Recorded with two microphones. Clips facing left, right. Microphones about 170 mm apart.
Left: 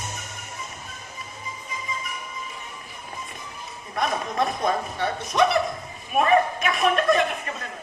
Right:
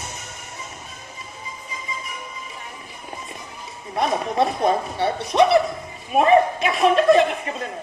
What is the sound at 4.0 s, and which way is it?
Chuckle, 25° right (ahead or behind).